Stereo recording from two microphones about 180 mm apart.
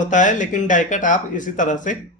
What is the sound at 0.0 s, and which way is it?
A man's voice, 45° left (ahead or behind).